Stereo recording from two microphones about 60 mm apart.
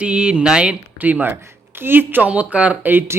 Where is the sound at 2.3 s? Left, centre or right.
Right.